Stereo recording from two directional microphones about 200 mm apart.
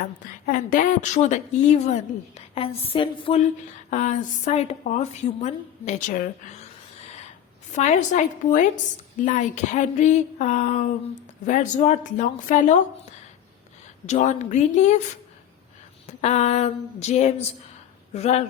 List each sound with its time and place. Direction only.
0.0 s a woman's voice: 40° left (ahead or behind)
7.7 s a woman's voice: 35° left (ahead or behind)
14.1 s a woman's voice: 35° left (ahead or behind)
16.0 s a woman's voice: 35° left (ahead or behind)